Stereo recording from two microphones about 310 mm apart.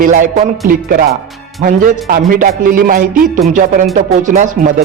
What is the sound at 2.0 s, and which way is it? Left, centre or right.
A man's voice, right.